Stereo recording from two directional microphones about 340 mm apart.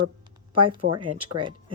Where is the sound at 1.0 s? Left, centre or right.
Right.